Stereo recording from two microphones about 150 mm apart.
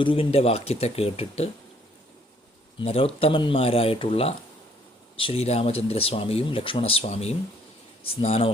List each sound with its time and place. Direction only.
0.0 s speech: 35° left (ahead or behind)
2.7 s speech: 40° left (ahead or behind)